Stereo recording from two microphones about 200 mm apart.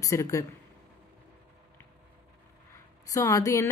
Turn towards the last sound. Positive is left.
turn(degrees=15)  # may be behind; listen again after turning